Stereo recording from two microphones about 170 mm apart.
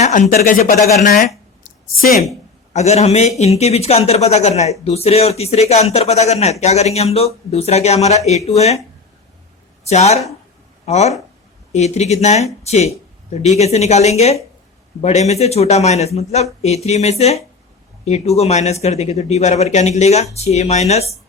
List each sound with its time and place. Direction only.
0.0 s speech: 50° left (ahead or behind)
2.7 s a man's voice: 40° left (ahead or behind)
9.8 s a man's voice: 40° left (ahead or behind)